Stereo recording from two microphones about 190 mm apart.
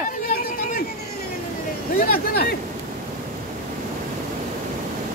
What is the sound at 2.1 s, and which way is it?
Speech, 50° left (ahead or behind).